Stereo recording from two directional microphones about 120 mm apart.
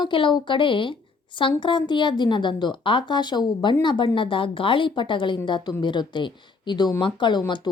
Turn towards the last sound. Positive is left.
turn(degrees=40)  # may be behind; listen again after turning